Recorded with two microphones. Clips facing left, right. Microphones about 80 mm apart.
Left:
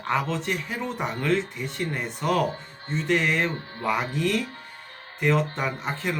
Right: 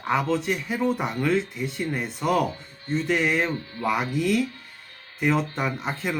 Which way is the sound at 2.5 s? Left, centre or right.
Left.